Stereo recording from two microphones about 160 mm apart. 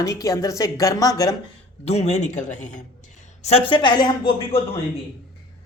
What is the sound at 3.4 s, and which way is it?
Speech, 40° left (ahead or behind).